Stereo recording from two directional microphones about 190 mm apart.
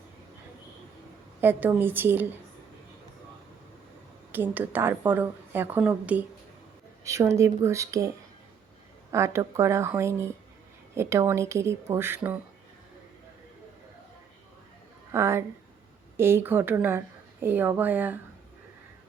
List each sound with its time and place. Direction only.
1.4 s a woman's voice: 10° right (ahead or behind)
4.3 s a woman's voice: 10° right (ahead or behind)
9.1 s a woman's voice: 15° right (ahead or behind)
15.1 s a woman's voice: 15° right (ahead or behind)